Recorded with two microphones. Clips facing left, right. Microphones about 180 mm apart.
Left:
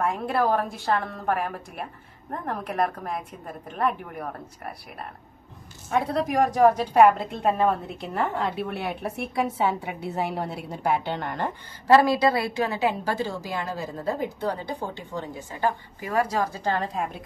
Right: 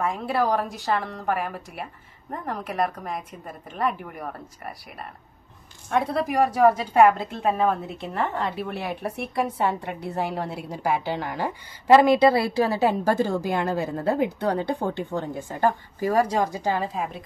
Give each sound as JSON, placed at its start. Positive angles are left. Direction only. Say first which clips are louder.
{"t": 0.0, "sound": "a woman's voice", "louder": "even", "side_deg": 0}
{"t": 5.9, "sound": "a woman's voice", "louder": "right 1 dB", "side_deg": 0}
{"t": 11.9, "sound": "a woman's voice", "louder": "right 3 dB", "side_deg": -20}
{"t": 16.0, "sound": "speech", "louder": "right 4 dB", "side_deg": -30}
{"t": 16.5, "sound": "a woman's voice", "louder": "right 1 dB", "side_deg": -10}